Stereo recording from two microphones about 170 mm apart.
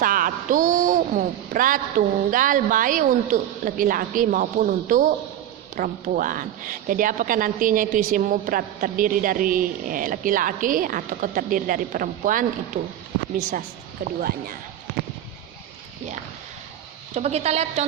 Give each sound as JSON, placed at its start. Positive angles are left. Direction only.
{"t": 0.0, "sound": "a woman's voice", "side_deg": -55}
{"t": 14.0, "sound": "speech", "side_deg": -60}
{"t": 17.2, "sound": "a woman's voice", "side_deg": -40}